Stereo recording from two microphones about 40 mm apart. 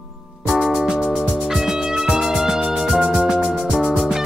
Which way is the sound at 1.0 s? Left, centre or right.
Centre.